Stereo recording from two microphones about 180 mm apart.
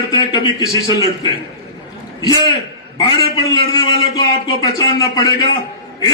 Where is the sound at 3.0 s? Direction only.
25° left (ahead or behind).